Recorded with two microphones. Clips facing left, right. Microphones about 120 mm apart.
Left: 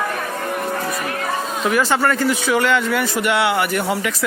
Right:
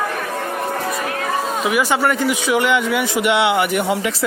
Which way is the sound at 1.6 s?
15° right (ahead or behind).